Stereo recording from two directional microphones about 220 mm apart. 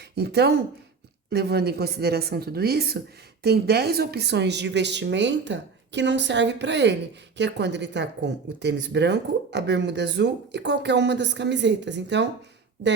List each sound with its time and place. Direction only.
0.2 s speech: 50° right (ahead or behind)